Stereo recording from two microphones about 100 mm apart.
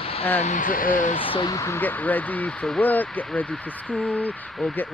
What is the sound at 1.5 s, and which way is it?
Speech, 30° left (ahead or behind).